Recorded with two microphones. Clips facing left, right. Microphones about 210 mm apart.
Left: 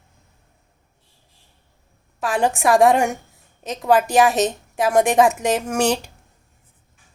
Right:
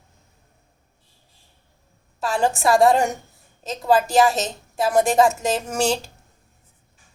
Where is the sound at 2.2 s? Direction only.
15° left (ahead or behind).